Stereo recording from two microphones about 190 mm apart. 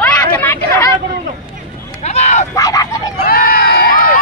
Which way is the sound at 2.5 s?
20° left (ahead or behind).